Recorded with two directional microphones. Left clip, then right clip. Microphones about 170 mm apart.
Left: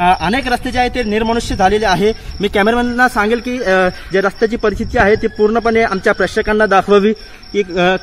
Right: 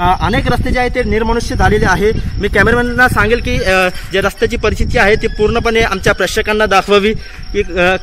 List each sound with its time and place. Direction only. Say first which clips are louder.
0.0 s a man's voice: even; 20° left (ahead or behind); by 8.0 s 60° left (ahead or behind)